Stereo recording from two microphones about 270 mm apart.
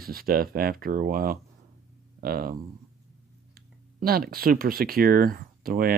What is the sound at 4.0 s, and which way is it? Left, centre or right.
Speech, right.